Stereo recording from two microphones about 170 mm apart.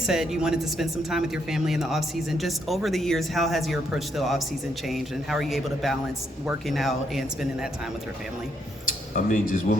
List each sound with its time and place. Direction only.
0.1 s speech: 5° right (ahead or behind)
9.1 s speech: 50° left (ahead or behind)